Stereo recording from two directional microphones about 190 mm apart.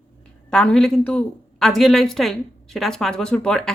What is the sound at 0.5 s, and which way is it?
A woman's voice, 5° left (ahead or behind).